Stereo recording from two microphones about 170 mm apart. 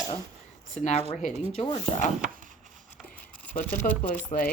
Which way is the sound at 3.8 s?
50° left (ahead or behind).